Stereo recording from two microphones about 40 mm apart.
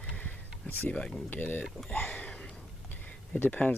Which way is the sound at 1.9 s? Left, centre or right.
Left.